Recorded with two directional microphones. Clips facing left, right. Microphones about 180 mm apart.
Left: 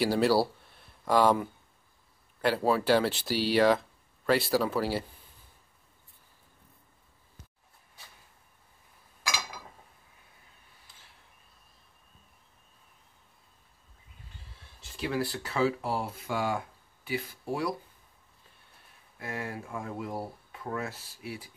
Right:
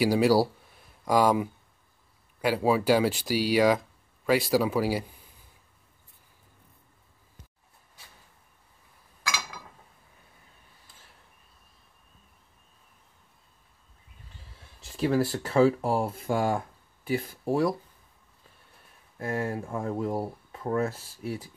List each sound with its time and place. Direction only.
0.0 s speech: 10° right (ahead or behind)
15.0 s speech: 40° right (ahead or behind)
19.1 s speech: 40° right (ahead or behind)